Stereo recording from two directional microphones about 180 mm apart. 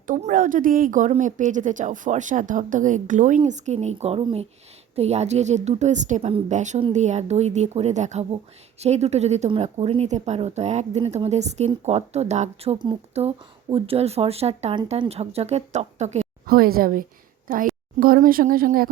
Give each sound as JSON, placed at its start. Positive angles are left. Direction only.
{"t": 0.1, "sound": "a woman's voice", "side_deg": -45}
{"t": 16.5, "sound": "a woman's voice", "side_deg": -55}